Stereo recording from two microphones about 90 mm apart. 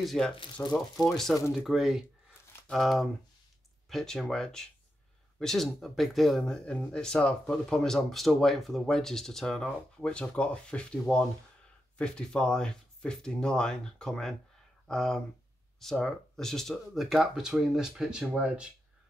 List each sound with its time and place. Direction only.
0.0 s speech: centre (ahead or behind)
0.6 s speech: 15° left (ahead or behind)
1.1 s speech: 5° left (ahead or behind)